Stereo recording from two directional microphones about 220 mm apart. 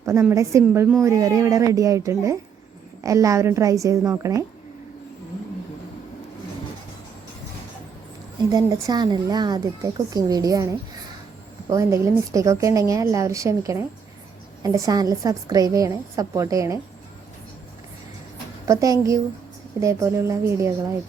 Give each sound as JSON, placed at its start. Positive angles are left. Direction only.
{"t": 0.0, "sound": "speech", "side_deg": -15}
{"t": 8.4, "sound": "speech", "side_deg": -15}
{"t": 18.7, "sound": "speech", "side_deg": -15}